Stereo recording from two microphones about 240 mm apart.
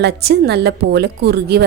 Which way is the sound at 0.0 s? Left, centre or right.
Right.